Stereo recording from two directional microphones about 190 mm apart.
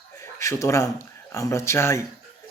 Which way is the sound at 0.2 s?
15° left (ahead or behind).